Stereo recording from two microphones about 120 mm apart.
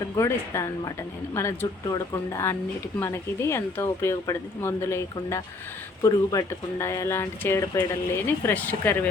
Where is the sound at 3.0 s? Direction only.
20° left (ahead or behind).